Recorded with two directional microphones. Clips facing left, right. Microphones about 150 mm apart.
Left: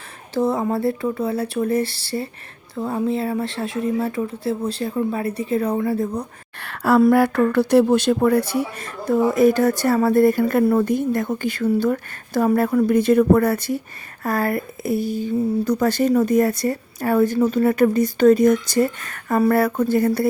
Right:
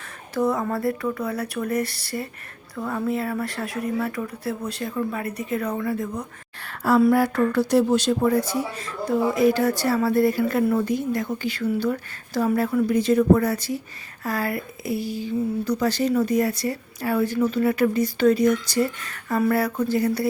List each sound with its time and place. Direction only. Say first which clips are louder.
0.3 s speech: left 3 dB; 25° left (ahead or behind)
6.6 s a sound: left 3 dB; 65° left (ahead or behind)
7.1 s speech: left 3 dB; 60° left (ahead or behind)